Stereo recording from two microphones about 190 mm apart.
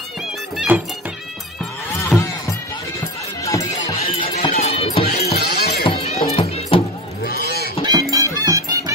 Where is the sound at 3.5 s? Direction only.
15° left (ahead or behind).